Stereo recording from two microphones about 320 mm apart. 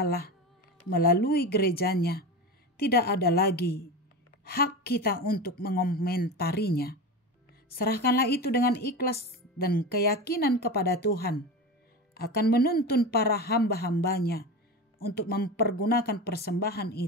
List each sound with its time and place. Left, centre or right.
0.0 s a woman's voice: left